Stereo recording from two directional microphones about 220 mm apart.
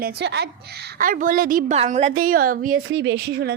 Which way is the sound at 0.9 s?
40° right (ahead or behind).